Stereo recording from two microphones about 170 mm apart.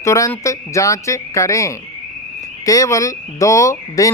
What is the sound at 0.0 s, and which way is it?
Speech, 15° left (ahead or behind).